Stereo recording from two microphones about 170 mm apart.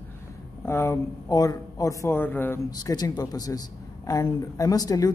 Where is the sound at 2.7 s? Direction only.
20° left (ahead or behind).